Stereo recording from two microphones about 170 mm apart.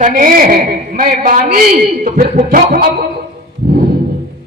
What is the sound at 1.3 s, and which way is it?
Speech, 55° right (ahead or behind).